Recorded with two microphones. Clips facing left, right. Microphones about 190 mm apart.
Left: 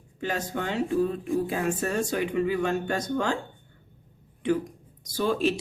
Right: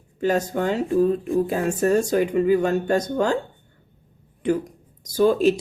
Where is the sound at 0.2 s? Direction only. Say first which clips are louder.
Right 8 dB; 40° right (ahead or behind).